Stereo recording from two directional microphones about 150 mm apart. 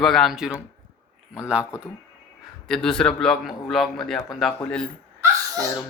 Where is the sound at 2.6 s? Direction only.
5° left (ahead or behind).